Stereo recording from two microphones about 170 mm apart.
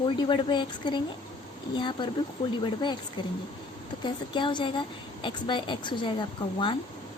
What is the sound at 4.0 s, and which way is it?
A woman's voice, 25° left (ahead or behind).